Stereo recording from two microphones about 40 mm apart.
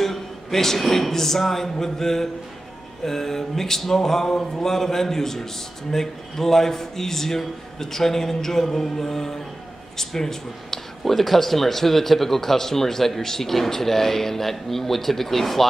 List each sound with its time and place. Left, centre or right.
0.0 s speech: centre